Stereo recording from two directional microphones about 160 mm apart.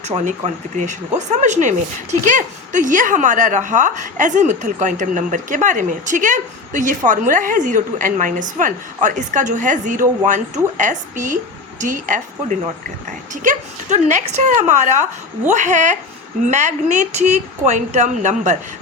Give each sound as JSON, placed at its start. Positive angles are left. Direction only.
{"t": 0.0, "sound": "a woman's voice", "side_deg": -45}